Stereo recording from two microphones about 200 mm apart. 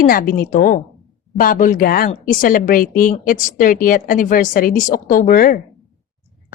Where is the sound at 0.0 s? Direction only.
45° left (ahead or behind).